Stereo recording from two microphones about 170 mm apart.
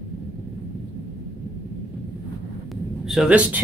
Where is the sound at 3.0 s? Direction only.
5° right (ahead or behind).